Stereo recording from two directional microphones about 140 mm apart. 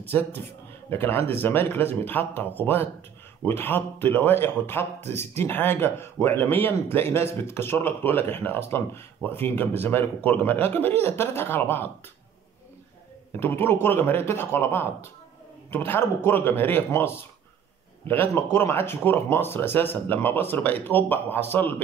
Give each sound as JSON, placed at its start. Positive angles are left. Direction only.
{"t": 0.1, "sound": "speech", "side_deg": 15}
{"t": 5.0, "sound": "speech", "side_deg": -50}
{"t": 5.3, "sound": "speech", "side_deg": 15}
{"t": 13.4, "sound": "speech", "side_deg": 15}